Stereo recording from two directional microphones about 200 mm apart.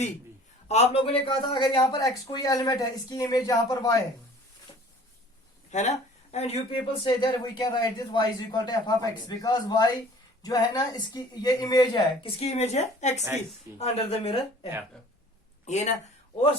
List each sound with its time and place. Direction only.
0.7 s speech: 30° left (ahead or behind)
5.7 s speech: 35° left (ahead or behind)